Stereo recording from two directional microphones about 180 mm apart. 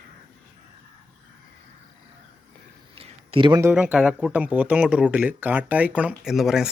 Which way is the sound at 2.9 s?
30° right (ahead or behind).